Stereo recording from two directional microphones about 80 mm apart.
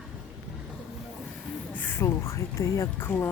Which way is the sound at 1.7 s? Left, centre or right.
Left.